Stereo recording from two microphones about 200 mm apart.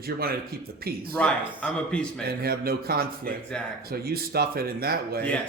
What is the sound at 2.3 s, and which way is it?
Speech, 50° right (ahead or behind).